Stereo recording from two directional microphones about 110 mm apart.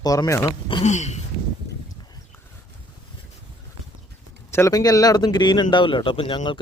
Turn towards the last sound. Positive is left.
turn(degrees=50)  # may be behind; listen again after turning